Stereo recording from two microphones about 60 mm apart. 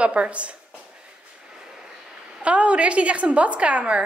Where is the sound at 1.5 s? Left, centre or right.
Centre.